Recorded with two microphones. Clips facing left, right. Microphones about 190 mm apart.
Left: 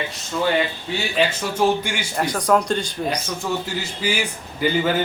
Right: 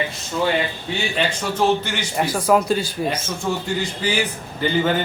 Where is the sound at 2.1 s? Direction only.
5° right (ahead or behind).